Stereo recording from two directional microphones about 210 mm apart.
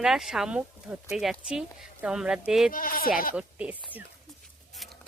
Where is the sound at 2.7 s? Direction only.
40° left (ahead or behind).